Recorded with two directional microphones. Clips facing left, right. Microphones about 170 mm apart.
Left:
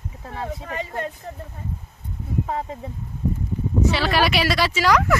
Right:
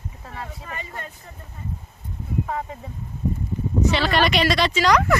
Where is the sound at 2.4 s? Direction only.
25° left (ahead or behind).